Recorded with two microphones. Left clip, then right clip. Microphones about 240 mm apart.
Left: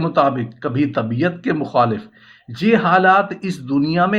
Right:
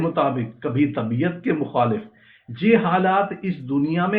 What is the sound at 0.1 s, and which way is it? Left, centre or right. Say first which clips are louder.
Speech: left 5 dB; left.